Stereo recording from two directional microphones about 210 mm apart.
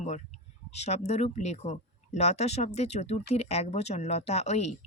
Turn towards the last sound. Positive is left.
turn(degrees=30)  # may be behind; listen again after turning